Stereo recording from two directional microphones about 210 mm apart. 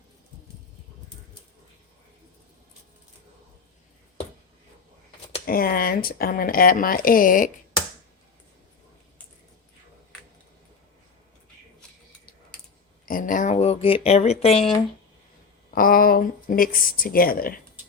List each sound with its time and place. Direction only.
5.5 s speech: 45° left (ahead or behind)
13.1 s a sound: 40° left (ahead or behind)
15.7 s speech: 45° left (ahead or behind)